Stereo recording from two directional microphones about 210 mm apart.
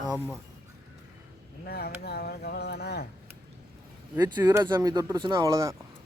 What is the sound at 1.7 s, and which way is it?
Speech, 50° left (ahead or behind).